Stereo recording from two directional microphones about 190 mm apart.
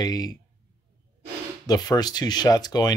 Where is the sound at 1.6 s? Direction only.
20° left (ahead or behind).